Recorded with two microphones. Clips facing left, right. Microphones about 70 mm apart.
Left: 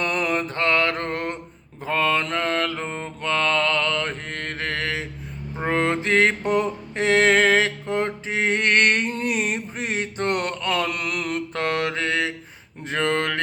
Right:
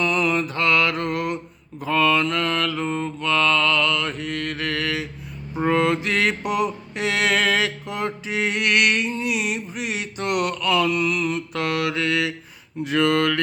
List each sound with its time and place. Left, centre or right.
0.0 s mantra: left
11.5 s mantra: left
12.8 s speech: left